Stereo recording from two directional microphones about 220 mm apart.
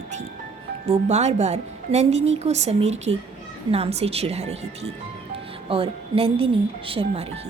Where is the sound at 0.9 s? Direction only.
30° right (ahead or behind).